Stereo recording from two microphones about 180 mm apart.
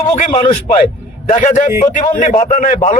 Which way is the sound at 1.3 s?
45° left (ahead or behind).